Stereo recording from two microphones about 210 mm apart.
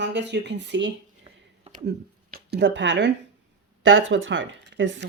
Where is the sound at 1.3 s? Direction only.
20° right (ahead or behind).